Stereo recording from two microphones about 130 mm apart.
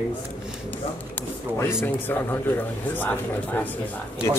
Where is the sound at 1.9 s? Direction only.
15° left (ahead or behind).